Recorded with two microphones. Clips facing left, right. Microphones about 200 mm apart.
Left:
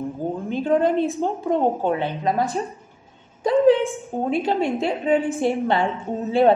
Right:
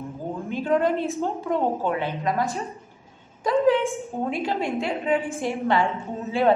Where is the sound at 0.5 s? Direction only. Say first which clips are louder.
Left 2 dB; 30° left (ahead or behind).